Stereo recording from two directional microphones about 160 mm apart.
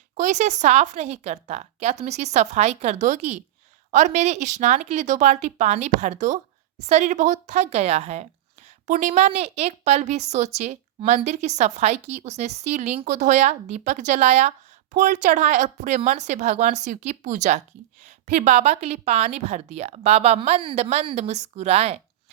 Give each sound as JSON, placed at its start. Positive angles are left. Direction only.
{"t": 0.2, "sound": "speech", "side_deg": -45}